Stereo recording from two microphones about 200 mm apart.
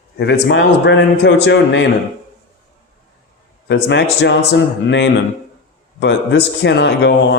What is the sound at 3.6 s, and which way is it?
Speech, 60° left (ahead or behind).